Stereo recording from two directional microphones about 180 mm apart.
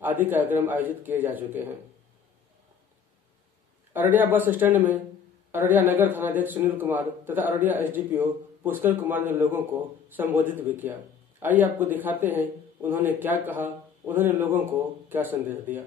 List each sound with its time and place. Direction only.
0.0 s speech: 10° right (ahead or behind)
3.9 s speech: 10° right (ahead or behind)